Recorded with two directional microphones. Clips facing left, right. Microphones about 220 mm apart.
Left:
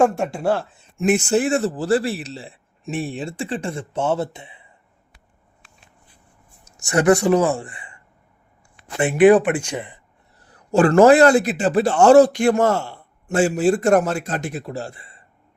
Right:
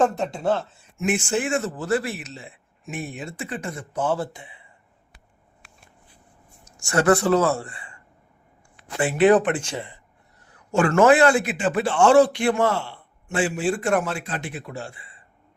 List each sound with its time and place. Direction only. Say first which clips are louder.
0.0 s speech: left 3 dB; 10° left (ahead or behind)
0.9 s a man's voice: left 6 dB; 40° left (ahead or behind); by 4.6 s 25° left (ahead or behind)
6.7 s speech: left 3 dB; 20° left (ahead or behind)
9.0 s speech: left 4 dB; 20° left (ahead or behind)
10.4 s a man's voice: left 5 dB; 35° left (ahead or behind)